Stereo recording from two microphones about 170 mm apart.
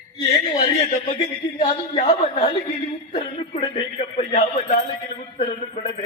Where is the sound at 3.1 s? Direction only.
35° left (ahead or behind).